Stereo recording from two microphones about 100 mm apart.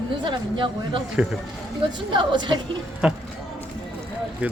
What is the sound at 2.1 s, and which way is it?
Speech, 50° right (ahead or behind).